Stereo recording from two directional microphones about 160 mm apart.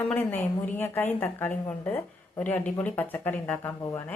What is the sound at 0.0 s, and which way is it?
A woman's voice, 10° left (ahead or behind).